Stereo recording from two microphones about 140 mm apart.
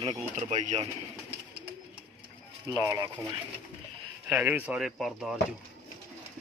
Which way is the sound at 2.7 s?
25° right (ahead or behind).